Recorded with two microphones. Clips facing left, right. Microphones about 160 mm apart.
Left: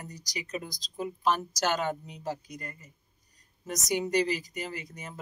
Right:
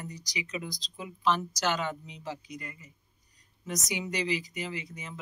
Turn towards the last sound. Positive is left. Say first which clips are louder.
# right 1 dB
turn(degrees=45)  # may be behind; listen again after turning